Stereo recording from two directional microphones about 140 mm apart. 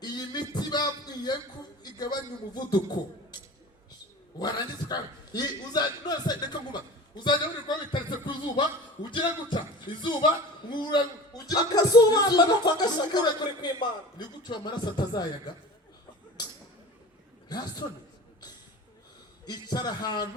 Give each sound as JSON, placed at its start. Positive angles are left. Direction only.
{"t": 0.0, "sound": "a sound", "side_deg": 30}
{"t": 2.6, "sound": "a man's voice", "side_deg": 30}
{"t": 4.4, "sound": "a man's voice", "side_deg": 30}
{"t": 7.9, "sound": "a sound", "side_deg": 35}
{"t": 9.0, "sound": "a man's voice", "side_deg": 35}
{"t": 17.5, "sound": "a man's voice", "side_deg": 30}
{"t": 19.5, "sound": "a man's voice", "side_deg": 30}